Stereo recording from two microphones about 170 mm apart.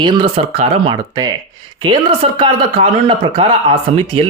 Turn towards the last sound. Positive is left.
turn(degrees=-35)  # may be behind; listen again after turning